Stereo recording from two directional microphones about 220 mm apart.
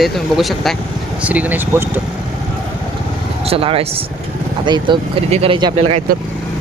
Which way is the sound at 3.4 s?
25° right (ahead or behind).